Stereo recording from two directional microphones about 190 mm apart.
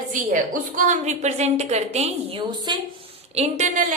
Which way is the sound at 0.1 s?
45° right (ahead or behind).